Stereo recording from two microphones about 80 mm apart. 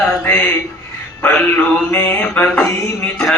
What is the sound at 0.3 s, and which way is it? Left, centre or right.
Mantra, left.